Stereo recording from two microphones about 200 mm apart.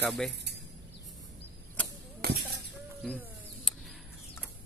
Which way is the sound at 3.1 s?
5° right (ahead or behind).